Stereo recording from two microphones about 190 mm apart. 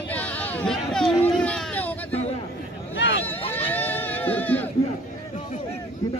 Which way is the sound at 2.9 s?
65° left (ahead or behind).